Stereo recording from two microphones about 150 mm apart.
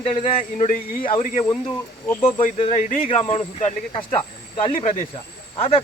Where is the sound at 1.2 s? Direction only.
60° left (ahead or behind).